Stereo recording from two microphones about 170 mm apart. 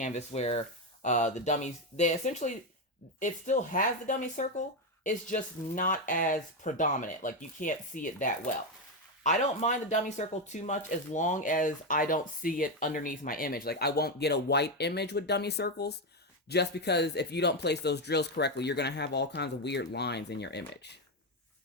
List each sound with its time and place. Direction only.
0.0 s speech: 40° left (ahead or behind); by 21.0 s 80° left